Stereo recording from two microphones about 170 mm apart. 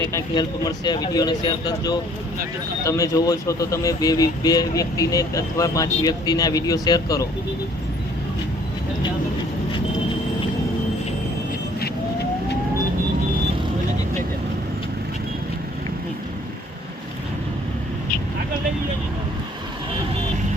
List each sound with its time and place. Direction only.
0.0 s speech: 20° left (ahead or behind)